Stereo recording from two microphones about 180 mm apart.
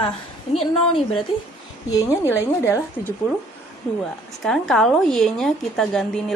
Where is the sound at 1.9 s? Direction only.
15° left (ahead or behind).